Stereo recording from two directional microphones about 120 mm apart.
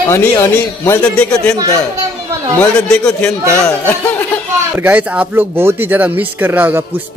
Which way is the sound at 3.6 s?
20° left (ahead or behind).